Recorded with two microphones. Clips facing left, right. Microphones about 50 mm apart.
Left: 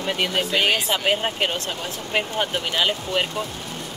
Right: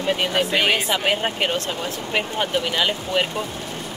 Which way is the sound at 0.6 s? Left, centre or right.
Centre.